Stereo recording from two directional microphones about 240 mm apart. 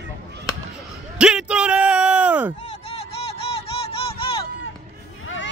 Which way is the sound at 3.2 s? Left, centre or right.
Left.